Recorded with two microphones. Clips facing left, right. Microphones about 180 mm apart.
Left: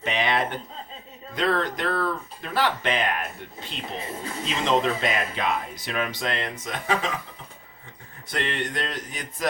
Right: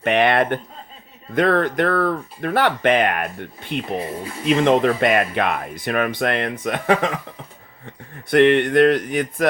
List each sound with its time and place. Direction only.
0.0 s speech: 60° right (ahead or behind)
8.3 s speech: 60° right (ahead or behind)